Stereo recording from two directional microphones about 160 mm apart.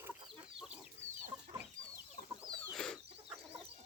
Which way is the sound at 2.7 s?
Centre (ahead or behind).